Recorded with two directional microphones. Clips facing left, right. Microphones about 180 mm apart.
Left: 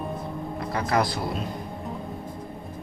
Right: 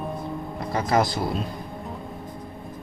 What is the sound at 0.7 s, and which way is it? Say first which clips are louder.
Speech: right 3 dB; 25° right (ahead or behind).